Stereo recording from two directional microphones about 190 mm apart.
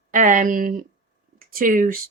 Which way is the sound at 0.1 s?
45° right (ahead or behind).